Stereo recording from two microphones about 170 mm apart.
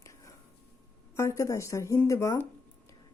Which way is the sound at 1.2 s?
15° left (ahead or behind).